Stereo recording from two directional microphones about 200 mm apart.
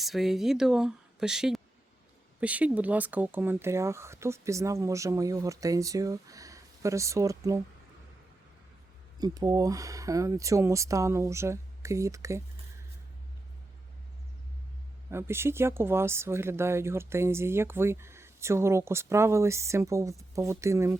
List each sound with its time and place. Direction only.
0.0 s speech: centre (ahead or behind)
9.1 s speech: 20° right (ahead or behind)
15.1 s speech: 10° right (ahead or behind)